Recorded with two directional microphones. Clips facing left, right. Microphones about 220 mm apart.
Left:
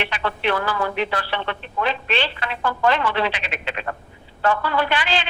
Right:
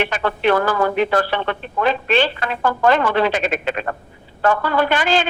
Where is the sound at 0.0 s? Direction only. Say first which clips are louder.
Right 5 dB; 45° right (ahead or behind).